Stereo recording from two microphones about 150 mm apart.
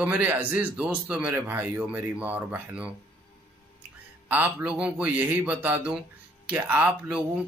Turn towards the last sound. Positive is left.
turn(degrees=-5)  # may be behind; listen again after turning